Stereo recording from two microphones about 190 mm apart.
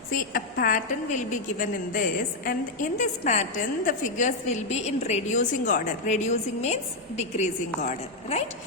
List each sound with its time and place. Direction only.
0.3 s a woman's voice: 50° left (ahead or behind)